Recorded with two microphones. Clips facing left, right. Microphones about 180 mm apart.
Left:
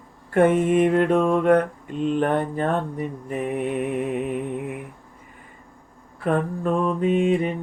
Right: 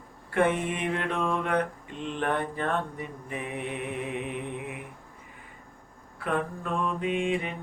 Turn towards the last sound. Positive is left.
turn(degrees=40)  # may be behind; listen again after turning